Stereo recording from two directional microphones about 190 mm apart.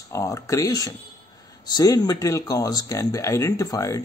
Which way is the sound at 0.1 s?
15° left (ahead or behind).